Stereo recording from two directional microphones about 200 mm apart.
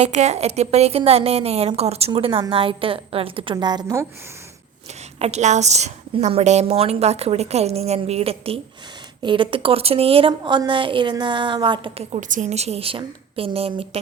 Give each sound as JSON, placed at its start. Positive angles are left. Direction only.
{"t": 0.0, "sound": "a woman's voice", "side_deg": -35}
{"t": 5.2, "sound": "a woman's voice", "side_deg": -35}